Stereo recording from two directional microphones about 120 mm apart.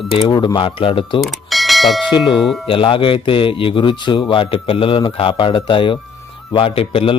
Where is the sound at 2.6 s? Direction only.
50° left (ahead or behind).